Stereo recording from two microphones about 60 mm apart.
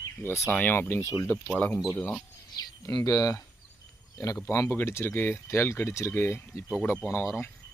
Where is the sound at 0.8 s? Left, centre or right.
Left.